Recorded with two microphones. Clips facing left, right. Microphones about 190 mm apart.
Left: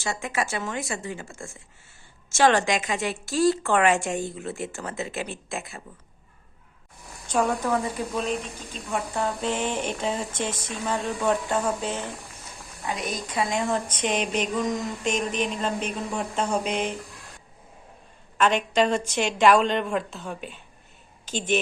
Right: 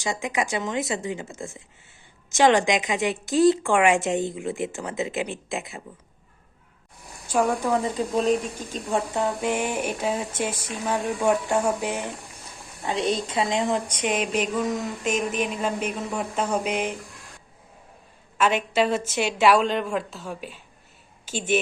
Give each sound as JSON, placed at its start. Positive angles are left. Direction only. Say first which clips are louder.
{"t": 0.0, "sound": "a woman's voice", "louder": "right 2 dB", "side_deg": -15}
{"t": 7.3, "sound": "a woman's voice", "louder": "right 2 dB", "side_deg": -10}
{"t": 8.1, "sound": "speech", "louder": "right 6 dB", "side_deg": -35}
{"t": 9.1, "sound": "a woman's voice", "louder": "right 2 dB", "side_deg": -15}
{"t": 12.8, "sound": "a woman's voice", "louder": "right 6 dB", "side_deg": -30}
{"t": 18.3, "sound": "a woman's voice", "louder": "even", "side_deg": -5}